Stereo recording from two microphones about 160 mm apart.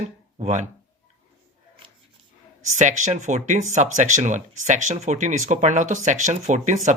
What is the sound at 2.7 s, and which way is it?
Speech, 50° right (ahead or behind).